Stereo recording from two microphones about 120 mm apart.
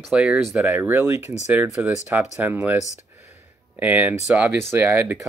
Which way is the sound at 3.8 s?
15° right (ahead or behind).